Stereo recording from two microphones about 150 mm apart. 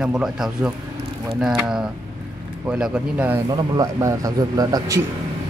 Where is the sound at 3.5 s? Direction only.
25° right (ahead or behind).